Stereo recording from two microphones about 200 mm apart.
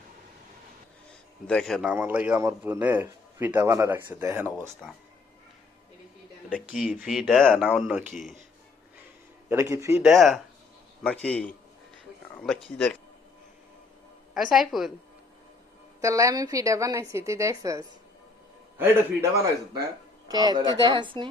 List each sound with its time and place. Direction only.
1.5 s speech: 5° left (ahead or behind)
6.7 s speech: centre (ahead or behind)
9.5 s speech: 15° right (ahead or behind)
10.0 s a man's voice: centre (ahead or behind)
12.6 s speech: 5° left (ahead or behind)
14.3 s speech: centre (ahead or behind)
16.0 s a woman's voice: 15° right (ahead or behind)